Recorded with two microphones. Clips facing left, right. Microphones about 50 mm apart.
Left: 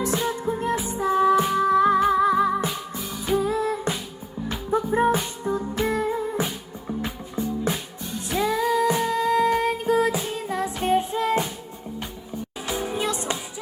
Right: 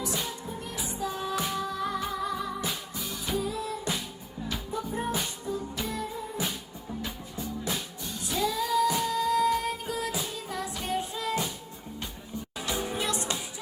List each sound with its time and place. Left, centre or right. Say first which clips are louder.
0.4 s music: left 12 dB; left
12.6 s music: left 5 dB; left